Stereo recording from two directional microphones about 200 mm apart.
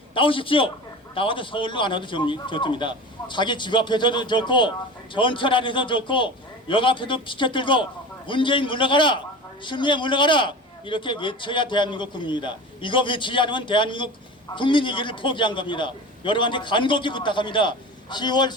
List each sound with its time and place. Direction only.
0.1 s a man's voice: 25° left (ahead or behind)